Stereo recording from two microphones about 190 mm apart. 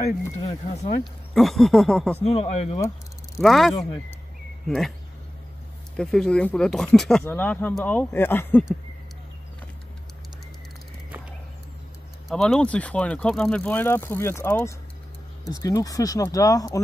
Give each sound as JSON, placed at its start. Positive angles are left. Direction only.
{"t": 0.5, "sound": "speech", "side_deg": 35}
{"t": 1.3, "sound": "a sound", "side_deg": 0}
{"t": 2.2, "sound": "speech", "side_deg": 30}
{"t": 3.3, "sound": "a sound", "side_deg": 0}
{"t": 5.9, "sound": "speech", "side_deg": 5}
{"t": 12.3, "sound": "speech", "side_deg": 0}